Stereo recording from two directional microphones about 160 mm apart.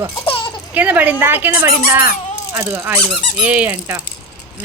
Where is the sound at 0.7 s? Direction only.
10° right (ahead or behind).